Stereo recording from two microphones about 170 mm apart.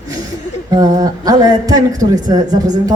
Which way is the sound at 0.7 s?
20° right (ahead or behind).